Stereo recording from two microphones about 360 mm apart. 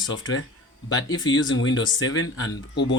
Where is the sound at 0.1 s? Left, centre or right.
Left.